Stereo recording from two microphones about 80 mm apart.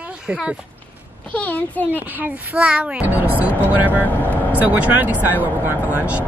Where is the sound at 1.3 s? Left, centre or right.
Centre.